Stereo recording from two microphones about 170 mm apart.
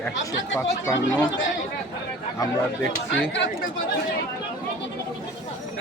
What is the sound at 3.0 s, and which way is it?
Speech, 90° left.